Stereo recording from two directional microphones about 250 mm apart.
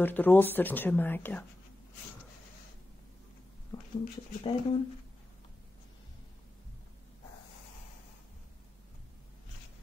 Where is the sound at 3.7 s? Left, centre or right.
Centre.